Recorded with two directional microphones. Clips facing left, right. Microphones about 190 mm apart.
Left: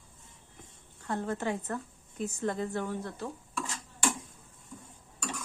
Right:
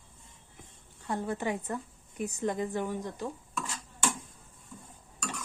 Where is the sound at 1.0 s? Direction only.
15° right (ahead or behind).